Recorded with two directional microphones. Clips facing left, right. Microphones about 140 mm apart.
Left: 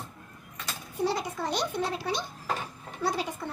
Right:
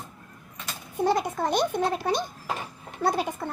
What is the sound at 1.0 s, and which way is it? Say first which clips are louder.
A child's voice: right 5 dB; 50° right (ahead or behind).